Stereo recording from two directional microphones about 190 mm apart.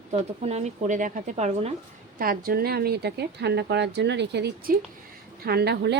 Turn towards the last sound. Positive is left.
turn(degrees=-60)  # may be behind; listen again after turning